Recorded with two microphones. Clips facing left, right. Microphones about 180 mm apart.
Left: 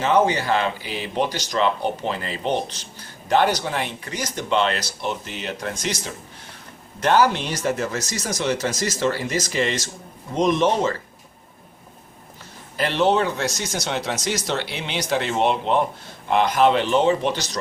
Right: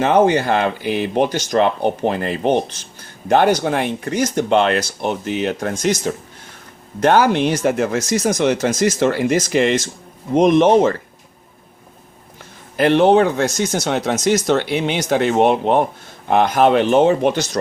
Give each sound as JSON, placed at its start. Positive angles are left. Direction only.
{"t": 0.0, "sound": "speech", "side_deg": -55}
{"t": 12.7, "sound": "speech", "side_deg": -55}